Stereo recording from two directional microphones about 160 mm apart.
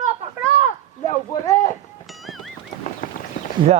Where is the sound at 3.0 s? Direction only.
60° left (ahead or behind).